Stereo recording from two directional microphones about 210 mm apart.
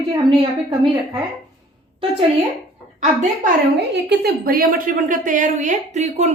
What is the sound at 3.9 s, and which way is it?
A woman's voice, 50° right (ahead or behind).